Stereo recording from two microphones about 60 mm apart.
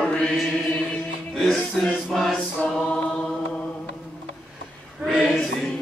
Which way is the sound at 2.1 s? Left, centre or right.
Centre.